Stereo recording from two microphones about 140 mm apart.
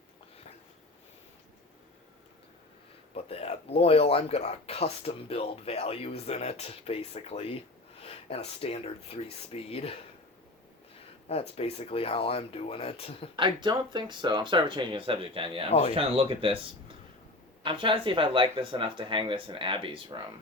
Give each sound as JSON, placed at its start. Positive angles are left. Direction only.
{"t": 3.2, "sound": "speech", "side_deg": 45}
{"t": 11.3, "sound": "speech", "side_deg": 45}
{"t": 13.3, "sound": "speech", "side_deg": -35}
{"t": 17.6, "sound": "speech", "side_deg": -35}